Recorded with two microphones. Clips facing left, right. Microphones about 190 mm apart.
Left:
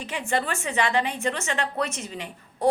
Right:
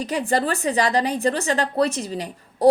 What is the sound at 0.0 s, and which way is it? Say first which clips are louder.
A woman's voice: right 6 dB; 40° right (ahead or behind).